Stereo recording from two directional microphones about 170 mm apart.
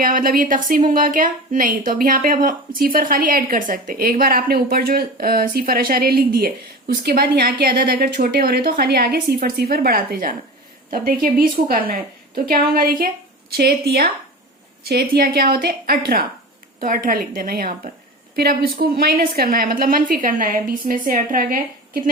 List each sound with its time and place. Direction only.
0.0 s a woman's voice: 55° right (ahead or behind)